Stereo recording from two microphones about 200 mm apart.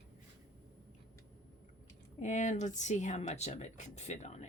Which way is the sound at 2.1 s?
35° left (ahead or behind).